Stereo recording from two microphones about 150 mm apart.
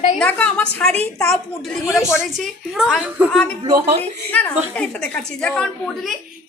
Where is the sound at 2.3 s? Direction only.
Centre (ahead or behind).